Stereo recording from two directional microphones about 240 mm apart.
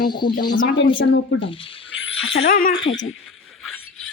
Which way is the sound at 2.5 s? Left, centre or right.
Left.